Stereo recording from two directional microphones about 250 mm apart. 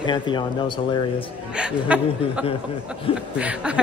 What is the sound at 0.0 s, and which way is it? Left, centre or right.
Speech, centre.